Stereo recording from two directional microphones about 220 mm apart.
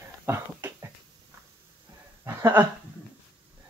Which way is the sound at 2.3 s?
10° right (ahead or behind).